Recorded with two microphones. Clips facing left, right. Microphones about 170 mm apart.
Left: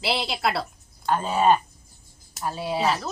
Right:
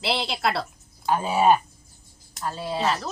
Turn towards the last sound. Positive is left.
turn(degrees=0)  # may be behind; listen again after turning